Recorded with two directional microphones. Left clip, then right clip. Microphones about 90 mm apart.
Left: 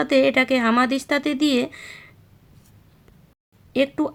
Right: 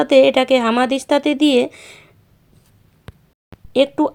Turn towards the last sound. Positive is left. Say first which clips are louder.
# right 6 dB
turn(degrees=-40)  # may be behind; listen again after turning